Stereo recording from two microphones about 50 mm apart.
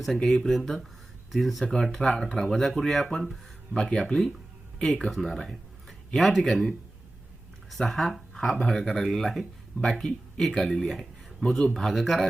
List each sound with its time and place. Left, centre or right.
0.0 s speech: centre
3.8 s speech: centre
5.2 s a sound: centre
6.1 s speech: centre
10.8 s speech: centre